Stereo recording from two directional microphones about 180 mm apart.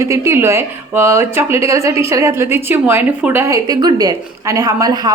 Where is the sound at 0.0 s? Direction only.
15° right (ahead or behind).